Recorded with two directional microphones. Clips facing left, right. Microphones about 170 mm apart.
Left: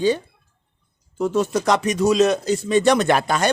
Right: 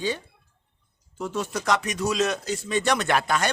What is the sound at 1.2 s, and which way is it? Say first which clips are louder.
Speech: left 9 dB; 40° left (ahead or behind).